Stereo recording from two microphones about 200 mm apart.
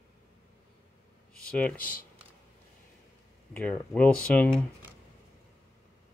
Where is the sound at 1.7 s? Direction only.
45° left (ahead or behind).